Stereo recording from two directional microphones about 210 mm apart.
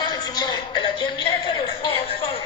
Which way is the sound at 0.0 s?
20° left (ahead or behind).